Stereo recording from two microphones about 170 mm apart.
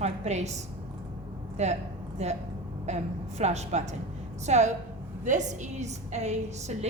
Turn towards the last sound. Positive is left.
turn(degrees=-40)  # may be behind; listen again after turning